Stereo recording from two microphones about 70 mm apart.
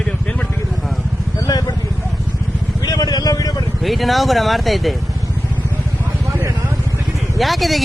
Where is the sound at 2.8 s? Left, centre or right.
Left.